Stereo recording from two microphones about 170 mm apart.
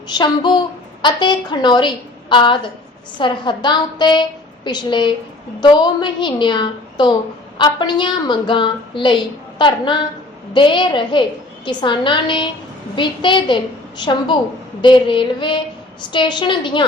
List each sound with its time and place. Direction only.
0.1 s a woman's voice: 25° left (ahead or behind)